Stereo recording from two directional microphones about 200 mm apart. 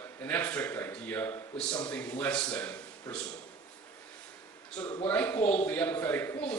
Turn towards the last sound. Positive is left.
turn(degrees=10)  # may be behind; listen again after turning